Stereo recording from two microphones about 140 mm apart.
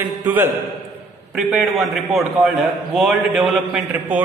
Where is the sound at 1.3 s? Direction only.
Centre (ahead or behind).